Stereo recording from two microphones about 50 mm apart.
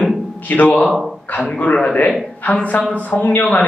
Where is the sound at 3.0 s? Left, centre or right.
Left.